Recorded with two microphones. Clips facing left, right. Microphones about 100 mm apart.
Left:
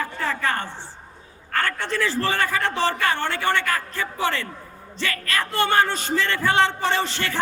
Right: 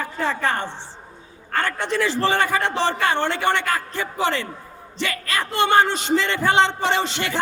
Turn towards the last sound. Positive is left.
turn(degrees=-20)  # may be behind; listen again after turning